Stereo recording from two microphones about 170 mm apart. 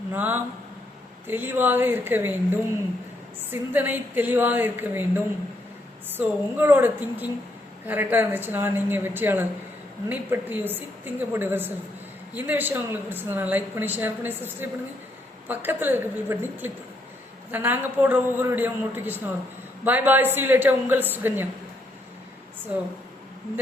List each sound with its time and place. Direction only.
0.1 s speech: 10° right (ahead or behind)
3.5 s speech: 10° right (ahead or behind)